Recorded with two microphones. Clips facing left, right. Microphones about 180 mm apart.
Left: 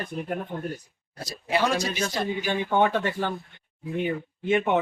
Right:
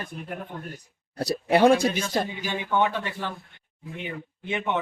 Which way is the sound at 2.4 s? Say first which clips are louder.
Left 5 dB; 50° left (ahead or behind).